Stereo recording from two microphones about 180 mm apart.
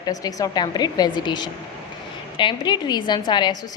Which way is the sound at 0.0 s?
20° left (ahead or behind).